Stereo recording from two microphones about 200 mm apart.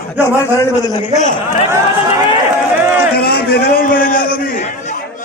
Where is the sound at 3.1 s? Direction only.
50° left (ahead or behind).